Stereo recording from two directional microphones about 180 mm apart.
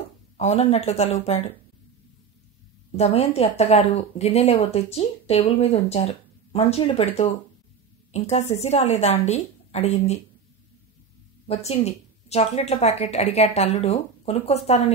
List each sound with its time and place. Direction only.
0.4 s speech: 35° left (ahead or behind)
3.0 s speech: 35° left (ahead or behind)
11.4 s speech: 35° left (ahead or behind)